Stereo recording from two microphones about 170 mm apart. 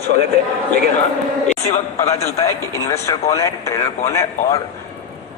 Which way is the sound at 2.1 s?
20° left (ahead or behind).